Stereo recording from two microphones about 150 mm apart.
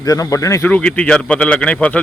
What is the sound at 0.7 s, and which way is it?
Speech, 10° left (ahead or behind).